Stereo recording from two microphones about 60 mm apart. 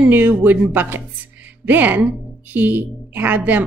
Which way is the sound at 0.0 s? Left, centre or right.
Right.